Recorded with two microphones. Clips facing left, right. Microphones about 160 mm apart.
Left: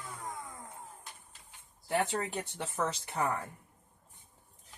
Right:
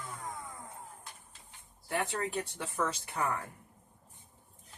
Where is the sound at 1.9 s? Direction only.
25° left (ahead or behind).